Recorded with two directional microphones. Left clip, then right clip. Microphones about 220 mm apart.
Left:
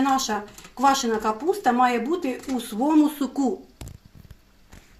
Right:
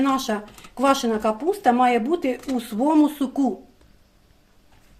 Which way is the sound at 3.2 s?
30° right (ahead or behind).